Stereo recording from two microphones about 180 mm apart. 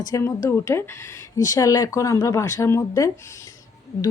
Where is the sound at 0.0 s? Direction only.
20° left (ahead or behind).